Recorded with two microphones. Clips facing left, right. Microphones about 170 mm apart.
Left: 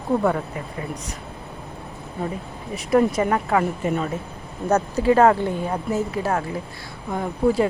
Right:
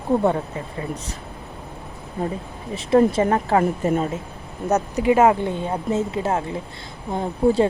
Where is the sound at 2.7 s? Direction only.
25° right (ahead or behind).